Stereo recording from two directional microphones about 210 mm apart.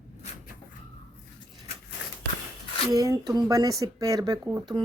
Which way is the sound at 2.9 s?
15° right (ahead or behind).